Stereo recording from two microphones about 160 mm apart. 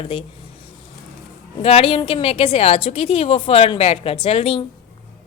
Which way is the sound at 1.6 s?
35° left (ahead or behind).